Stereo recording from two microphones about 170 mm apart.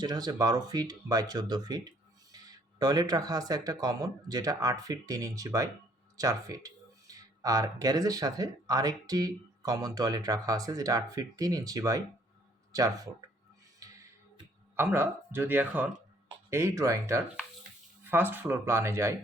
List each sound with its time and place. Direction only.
0.0 s speech: 25° right (ahead or behind)
13.7 s music: 20° right (ahead or behind)
14.8 s speech: 15° right (ahead or behind)